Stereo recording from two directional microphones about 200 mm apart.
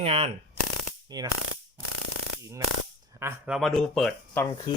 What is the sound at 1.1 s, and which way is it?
Speech, 20° right (ahead or behind).